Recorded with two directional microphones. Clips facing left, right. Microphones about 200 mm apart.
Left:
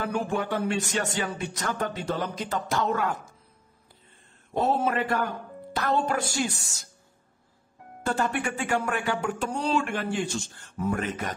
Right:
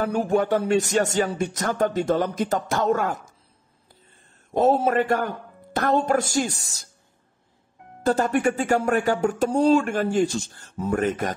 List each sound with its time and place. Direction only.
0.0 s speech: 40° right (ahead or behind)
4.7 s speech: 45° right (ahead or behind)
8.0 s speech: 40° right (ahead or behind)